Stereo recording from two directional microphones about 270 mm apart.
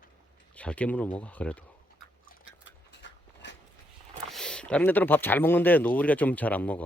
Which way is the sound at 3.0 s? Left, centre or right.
Left.